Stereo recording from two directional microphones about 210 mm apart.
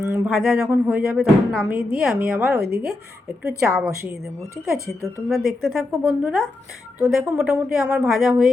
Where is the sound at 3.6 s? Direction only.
15° right (ahead or behind).